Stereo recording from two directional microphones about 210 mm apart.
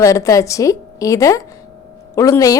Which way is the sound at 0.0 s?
15° left (ahead or behind).